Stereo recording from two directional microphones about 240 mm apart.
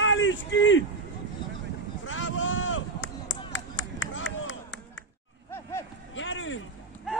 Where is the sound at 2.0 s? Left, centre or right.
Left.